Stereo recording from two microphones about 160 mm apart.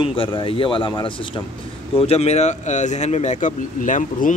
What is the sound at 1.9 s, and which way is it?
Speech, 40° left (ahead or behind).